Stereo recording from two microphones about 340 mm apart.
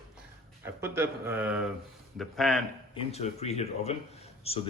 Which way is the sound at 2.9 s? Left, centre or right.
Centre.